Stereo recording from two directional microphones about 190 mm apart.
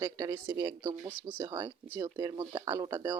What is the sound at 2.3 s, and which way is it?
Speech, 25° right (ahead or behind).